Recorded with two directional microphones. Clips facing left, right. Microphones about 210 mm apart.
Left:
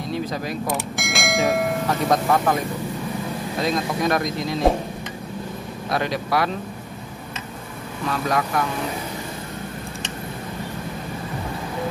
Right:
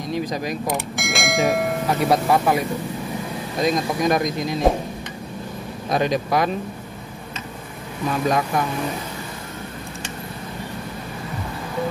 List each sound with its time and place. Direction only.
0.1 s speech: 15° right (ahead or behind)
0.7 s speech: centre (ahead or behind)
1.9 s speech: 10° right (ahead or behind)
3.6 s speech: 15° right (ahead or behind)
5.9 s speech: 20° right (ahead or behind)
8.1 s speech: 20° right (ahead or behind)